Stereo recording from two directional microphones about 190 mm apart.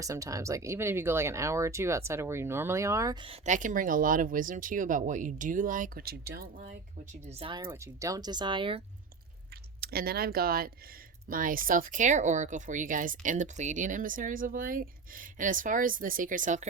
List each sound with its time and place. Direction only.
0.0 s speech: 15° right (ahead or behind)
3.2 s speech: 40° right (ahead or behind)
7.3 s speech: 30° right (ahead or behind)
7.7 s speech: 15° right (ahead or behind)
9.8 s speech: 55° right (ahead or behind)